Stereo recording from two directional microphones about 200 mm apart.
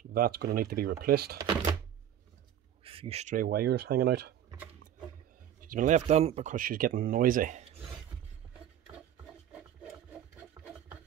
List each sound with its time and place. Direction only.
0.1 s speech: 50° right (ahead or behind)
2.8 s speech: 30° right (ahead or behind); by 4.4 s 55° right (ahead or behind)
5.7 s speech: 40° right (ahead or behind)
8.9 s a sound: 5° right (ahead or behind)